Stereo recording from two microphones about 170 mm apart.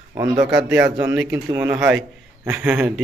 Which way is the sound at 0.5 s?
5° right (ahead or behind).